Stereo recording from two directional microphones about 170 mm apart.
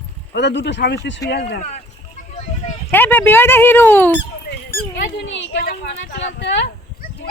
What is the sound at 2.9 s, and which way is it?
Speech, 10° left (ahead or behind).